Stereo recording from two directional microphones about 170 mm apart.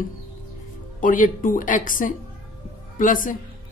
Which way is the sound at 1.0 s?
55° left (ahead or behind).